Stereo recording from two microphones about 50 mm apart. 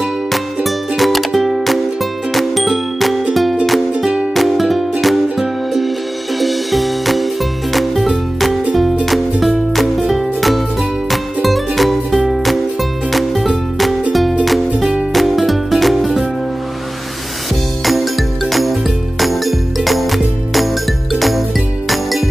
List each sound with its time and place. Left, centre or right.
0.7 s music: centre
2.3 s ding: centre
4.0 s music: centre
4.3 s music: centre
17.8 s music: centre